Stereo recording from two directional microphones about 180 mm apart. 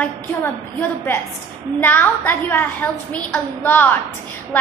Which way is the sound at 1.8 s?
10° left (ahead or behind).